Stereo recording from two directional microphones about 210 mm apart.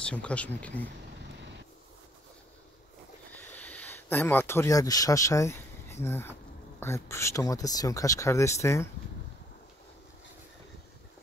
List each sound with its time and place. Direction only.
0.0 s speech: 5° left (ahead or behind)
3.3 s speech: 10° left (ahead or behind)